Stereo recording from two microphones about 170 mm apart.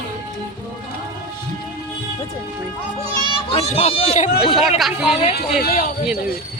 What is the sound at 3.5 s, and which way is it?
Speech, 40° left (ahead or behind).